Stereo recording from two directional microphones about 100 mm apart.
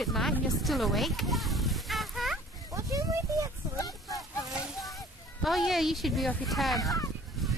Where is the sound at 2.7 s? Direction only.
35° right (ahead or behind).